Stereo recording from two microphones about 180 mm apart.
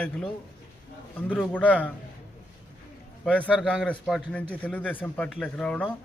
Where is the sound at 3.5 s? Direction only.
5° right (ahead or behind).